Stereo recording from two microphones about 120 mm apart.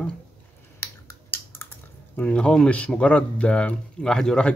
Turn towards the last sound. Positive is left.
turn(degrees=5)  # may be behind; listen again after turning